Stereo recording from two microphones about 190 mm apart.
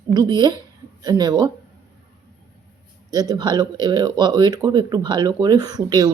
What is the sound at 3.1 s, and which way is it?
Speech, 20° right (ahead or behind).